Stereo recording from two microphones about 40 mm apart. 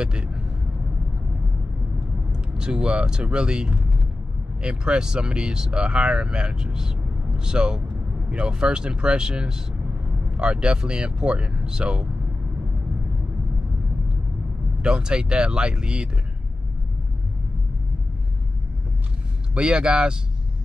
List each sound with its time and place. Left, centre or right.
0.0 s speech: right
2.3 s speech: right
14.8 s speech: right
19.5 s speech: right